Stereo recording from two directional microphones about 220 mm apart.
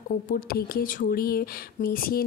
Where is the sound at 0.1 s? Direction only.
40° left (ahead or behind).